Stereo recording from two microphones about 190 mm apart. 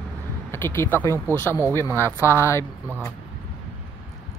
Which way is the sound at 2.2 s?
15° left (ahead or behind).